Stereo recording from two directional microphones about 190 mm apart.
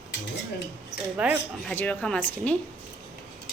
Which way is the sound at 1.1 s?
5° right (ahead or behind).